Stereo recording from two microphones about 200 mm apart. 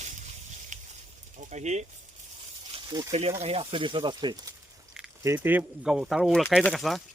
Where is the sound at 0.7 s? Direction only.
35° right (ahead or behind).